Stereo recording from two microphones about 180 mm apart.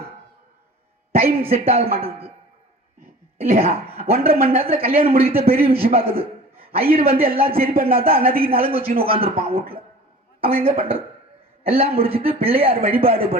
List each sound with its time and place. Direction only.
1.1 s a man's voice: 35° right (ahead or behind)
4.0 s a man's voice: 35° right (ahead or behind)